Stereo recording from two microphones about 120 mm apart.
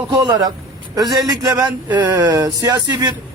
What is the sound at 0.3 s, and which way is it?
Speech, 30° right (ahead or behind).